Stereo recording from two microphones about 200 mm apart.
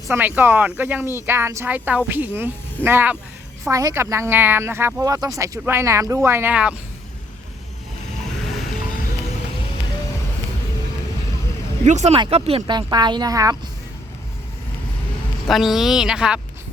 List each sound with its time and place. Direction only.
0.1 s speech: 10° right (ahead or behind)
11.9 s speech: 35° right (ahead or behind); by 13.6 s 20° right (ahead or behind)
15.4 s speech: centre (ahead or behind)